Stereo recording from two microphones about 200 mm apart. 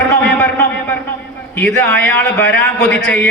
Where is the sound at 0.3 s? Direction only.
5° left (ahead or behind).